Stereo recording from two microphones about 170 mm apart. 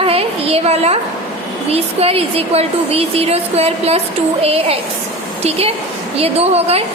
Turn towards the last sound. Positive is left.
turn(degrees=-35)  # may be behind; listen again after turning